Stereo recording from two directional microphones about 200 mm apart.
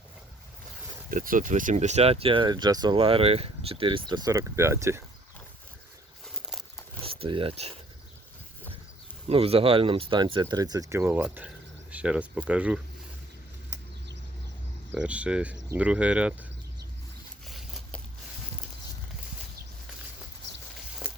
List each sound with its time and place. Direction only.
1.1 s speech: 45° right (ahead or behind); by 5.0 s 15° right (ahead or behind)
7.0 s speech: 30° right (ahead or behind)
9.2 s speech: 30° right (ahead or behind); by 12.8 s 5° right (ahead or behind)
14.9 s speech: 5° right (ahead or behind)
17.4 s a sound: centre (ahead or behind)